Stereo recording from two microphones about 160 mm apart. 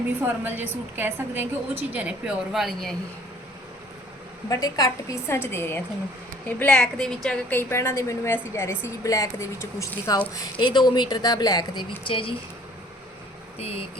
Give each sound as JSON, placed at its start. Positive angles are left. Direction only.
{"t": 0.2, "sound": "a woman's voice", "side_deg": -10}
{"t": 4.4, "sound": "a woman's voice", "side_deg": 20}
{"t": 7.7, "sound": "a woman's voice", "side_deg": 15}
{"t": 13.6, "sound": "speech", "side_deg": 40}